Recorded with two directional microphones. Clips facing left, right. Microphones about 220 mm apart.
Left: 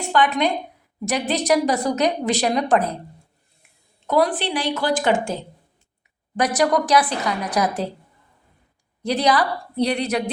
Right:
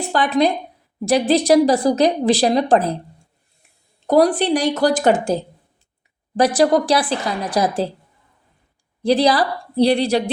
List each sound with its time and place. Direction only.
0.1 s a woman's voice: 35° right (ahead or behind)
4.0 s a woman's voice: 40° right (ahead or behind)
9.0 s a woman's voice: 35° right (ahead or behind)